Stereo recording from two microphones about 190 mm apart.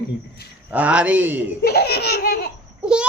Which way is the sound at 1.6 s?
55° left (ahead or behind).